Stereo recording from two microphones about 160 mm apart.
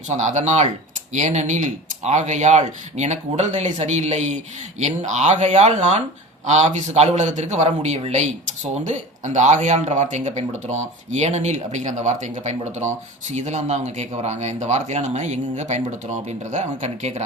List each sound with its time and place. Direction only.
0.1 s speech: 45° right (ahead or behind)